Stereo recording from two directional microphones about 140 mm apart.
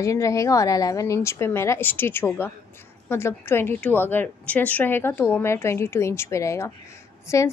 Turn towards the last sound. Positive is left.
turn(degrees=20)  # may be behind; listen again after turning